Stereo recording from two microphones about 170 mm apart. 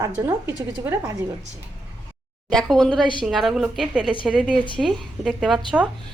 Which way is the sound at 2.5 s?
5° left (ahead or behind).